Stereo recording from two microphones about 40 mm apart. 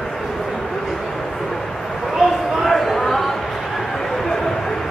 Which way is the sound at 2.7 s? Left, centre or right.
Centre.